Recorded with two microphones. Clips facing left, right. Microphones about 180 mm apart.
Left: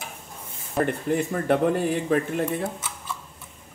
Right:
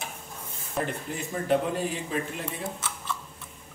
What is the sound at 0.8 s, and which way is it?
Speech, 55° left (ahead or behind).